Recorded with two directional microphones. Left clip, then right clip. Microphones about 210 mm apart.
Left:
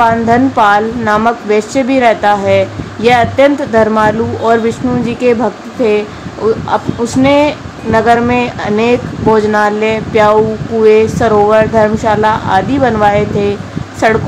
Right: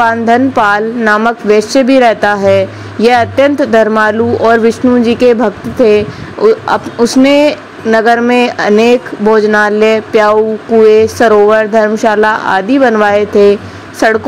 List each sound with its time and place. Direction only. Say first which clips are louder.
0.0 s a woman's voice: right 1 dB; 25° right (ahead or behind)